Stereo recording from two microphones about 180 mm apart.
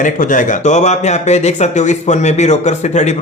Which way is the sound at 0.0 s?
45° left (ahead or behind).